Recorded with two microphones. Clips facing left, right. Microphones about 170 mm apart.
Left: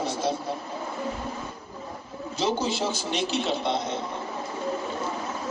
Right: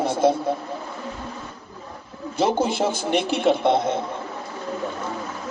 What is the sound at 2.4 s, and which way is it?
A man's voice, 55° right (ahead or behind).